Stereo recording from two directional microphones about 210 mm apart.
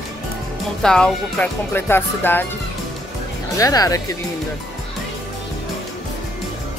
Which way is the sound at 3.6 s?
15° left (ahead or behind).